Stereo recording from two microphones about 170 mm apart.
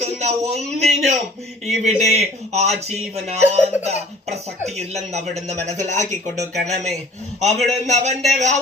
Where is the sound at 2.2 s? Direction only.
40° right (ahead or behind).